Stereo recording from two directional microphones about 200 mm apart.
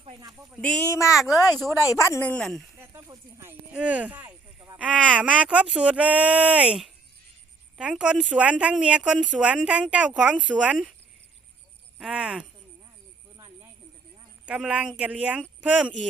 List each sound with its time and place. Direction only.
0.2 s speech: 20° right (ahead or behind)
0.5 s speech: 5° left (ahead or behind)
2.7 s speech: 15° right (ahead or behind)
11.9 s speech: centre (ahead or behind)
14.4 s speech: 5° right (ahead or behind)